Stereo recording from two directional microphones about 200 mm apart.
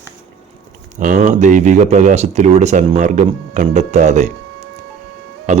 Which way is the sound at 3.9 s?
35° right (ahead or behind).